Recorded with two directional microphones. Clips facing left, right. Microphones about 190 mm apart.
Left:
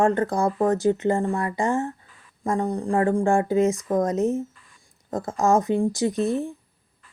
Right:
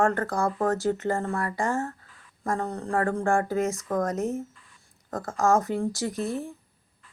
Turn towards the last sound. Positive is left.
turn(degrees=20)  # may be behind; listen again after turning